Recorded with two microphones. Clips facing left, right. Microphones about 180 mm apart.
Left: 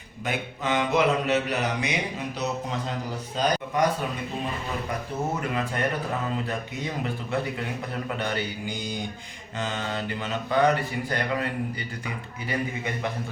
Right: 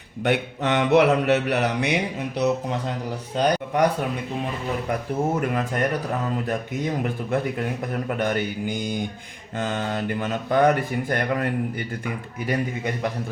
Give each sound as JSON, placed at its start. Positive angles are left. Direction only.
{"t": 0.2, "sound": "mantra", "side_deg": -70}
{"t": 3.3, "sound": "a man's voice", "side_deg": -60}
{"t": 5.4, "sound": "speech", "side_deg": -45}